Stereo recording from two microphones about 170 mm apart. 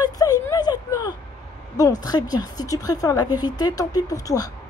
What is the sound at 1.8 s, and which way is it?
Speech, 20° left (ahead or behind).